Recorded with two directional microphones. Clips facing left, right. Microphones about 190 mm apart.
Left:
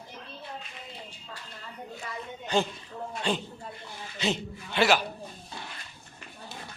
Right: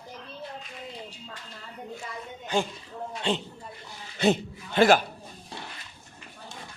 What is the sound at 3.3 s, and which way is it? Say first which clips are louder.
Speech: right 2 dB; 25° right (ahead or behind).